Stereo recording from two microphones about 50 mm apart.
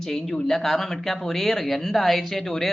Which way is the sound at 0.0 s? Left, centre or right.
Centre.